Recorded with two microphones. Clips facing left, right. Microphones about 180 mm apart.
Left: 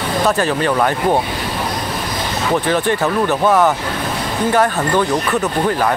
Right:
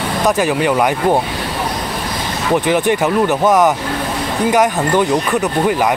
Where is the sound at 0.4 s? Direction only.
10° right (ahead or behind).